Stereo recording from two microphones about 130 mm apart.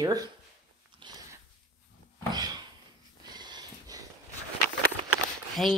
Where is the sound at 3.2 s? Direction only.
35° right (ahead or behind).